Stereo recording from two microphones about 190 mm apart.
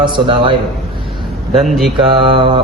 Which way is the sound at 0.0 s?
25° right (ahead or behind).